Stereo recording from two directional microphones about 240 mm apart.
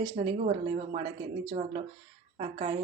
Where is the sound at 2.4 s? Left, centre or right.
Right.